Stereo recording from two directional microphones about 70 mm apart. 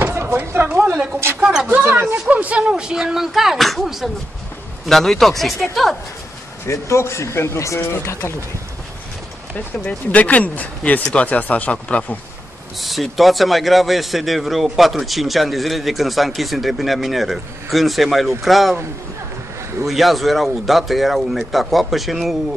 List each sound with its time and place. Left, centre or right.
0.0 s a sound: right
1.4 s a sound: centre
2.2 s speech: centre
2.7 s a man's voice: centre
6.6 s speech: left
9.8 s speech: left
12.8 s a man's voice: centre
19.8 s a man's voice: centre